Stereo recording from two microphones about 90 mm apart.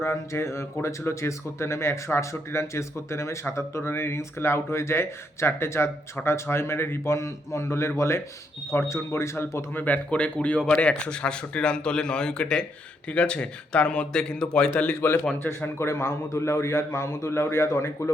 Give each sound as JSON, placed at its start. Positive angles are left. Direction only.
{"t": 0.0, "sound": "speech", "side_deg": 30}
{"t": 9.8, "sound": "speech", "side_deg": 15}
{"t": 14.8, "sound": "speech", "side_deg": 20}